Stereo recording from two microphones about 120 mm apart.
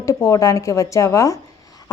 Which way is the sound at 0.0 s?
25° left (ahead or behind).